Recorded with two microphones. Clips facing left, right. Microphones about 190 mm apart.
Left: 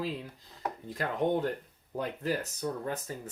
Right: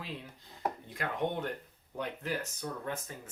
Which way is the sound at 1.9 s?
35° left (ahead or behind).